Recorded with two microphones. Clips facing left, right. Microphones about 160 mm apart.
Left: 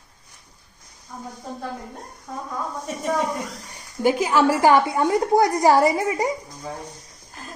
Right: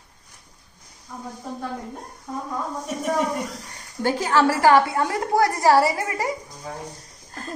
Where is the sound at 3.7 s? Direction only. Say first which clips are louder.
Left 5 dB; 10° left (ahead or behind).